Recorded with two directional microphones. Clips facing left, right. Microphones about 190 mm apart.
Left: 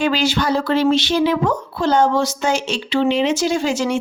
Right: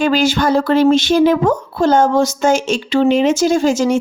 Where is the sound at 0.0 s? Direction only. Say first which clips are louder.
Right 4 dB; 45° right (ahead or behind).